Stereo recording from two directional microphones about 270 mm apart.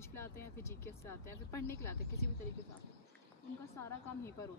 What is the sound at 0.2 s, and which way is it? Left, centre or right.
Speech, centre.